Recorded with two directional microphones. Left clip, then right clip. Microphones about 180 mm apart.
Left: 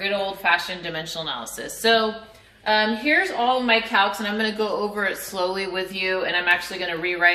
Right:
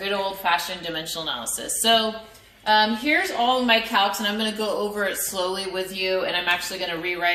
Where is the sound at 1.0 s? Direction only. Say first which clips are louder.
Even; 25° left (ahead or behind).